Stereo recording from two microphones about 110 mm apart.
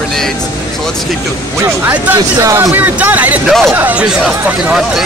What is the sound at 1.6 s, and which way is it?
Speech, 20° right (ahead or behind).